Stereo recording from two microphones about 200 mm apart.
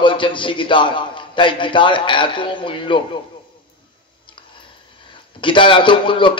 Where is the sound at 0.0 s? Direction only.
25° left (ahead or behind).